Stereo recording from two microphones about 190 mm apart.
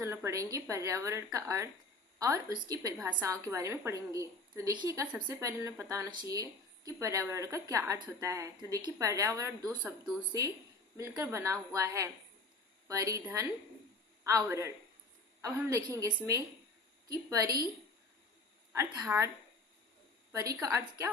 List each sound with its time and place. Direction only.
0.0 s a woman's voice: 15° right (ahead or behind)
11.2 s a woman's voice: 15° right (ahead or behind)
18.7 s a woman's voice: 15° right (ahead or behind)
20.3 s a woman's voice: 15° right (ahead or behind)